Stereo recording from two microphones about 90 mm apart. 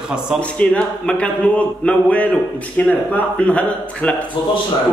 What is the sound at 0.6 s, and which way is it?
A man's voice, 10° left (ahead or behind).